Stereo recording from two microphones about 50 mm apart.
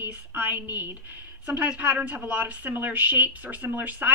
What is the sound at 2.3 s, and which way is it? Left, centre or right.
Speech, right.